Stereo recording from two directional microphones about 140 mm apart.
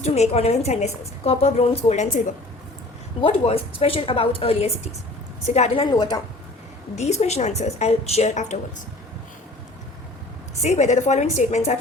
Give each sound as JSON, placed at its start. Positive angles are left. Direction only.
{"t": 0.0, "sound": "a woman's voice", "side_deg": 50}
{"t": 3.2, "sound": "a woman's voice", "side_deg": 40}
{"t": 5.9, "sound": "a woman's voice", "side_deg": 30}
{"t": 6.9, "sound": "a woman's voice", "side_deg": 50}
{"t": 10.6, "sound": "a woman's voice", "side_deg": 55}